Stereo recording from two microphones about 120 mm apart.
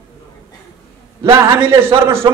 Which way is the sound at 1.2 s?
25° right (ahead or behind).